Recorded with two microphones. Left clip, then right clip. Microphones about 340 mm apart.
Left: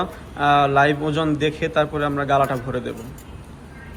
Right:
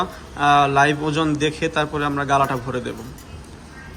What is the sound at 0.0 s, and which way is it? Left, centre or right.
A man's voice, centre.